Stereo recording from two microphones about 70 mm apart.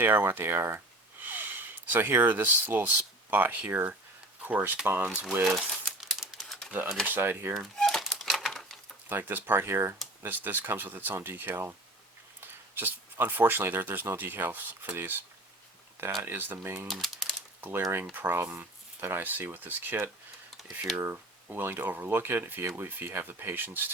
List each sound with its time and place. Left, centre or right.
0.0 s speech: right
5.5 s crumpling: centre
7.0 s speech: right
7.8 s crumpling: centre
8.1 s typewriter: centre
9.0 s speech: right
16.2 s speech: right
16.9 s typewriter: centre
17.6 s speech: right